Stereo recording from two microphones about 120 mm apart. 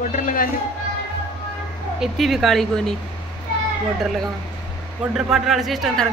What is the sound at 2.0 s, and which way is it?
Speech, centre (ahead or behind).